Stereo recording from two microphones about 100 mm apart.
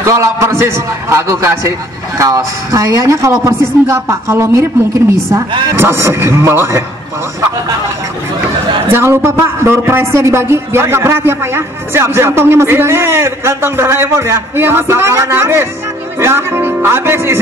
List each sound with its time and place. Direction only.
0.0 s speech: 30° right (ahead or behind)
5.8 s speech: 25° right (ahead or behind)
8.9 s speech: 25° right (ahead or behind)